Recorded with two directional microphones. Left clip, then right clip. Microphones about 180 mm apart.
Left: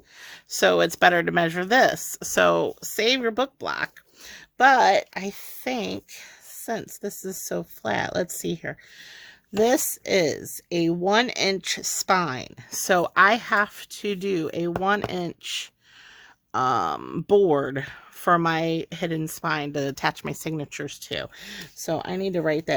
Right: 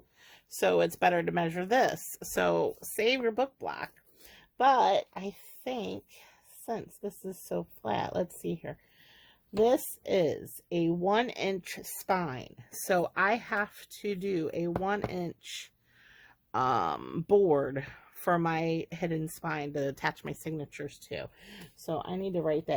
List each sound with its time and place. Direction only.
0.2 s speech: 35° left (ahead or behind)
16.5 s speech: 15° left (ahead or behind); by 22.7 s 40° left (ahead or behind)